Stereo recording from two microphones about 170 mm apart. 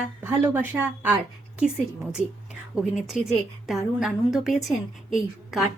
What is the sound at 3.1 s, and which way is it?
A woman's voice, centre (ahead or behind).